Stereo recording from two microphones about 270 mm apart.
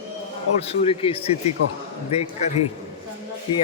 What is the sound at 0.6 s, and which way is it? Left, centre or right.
A man's voice, left.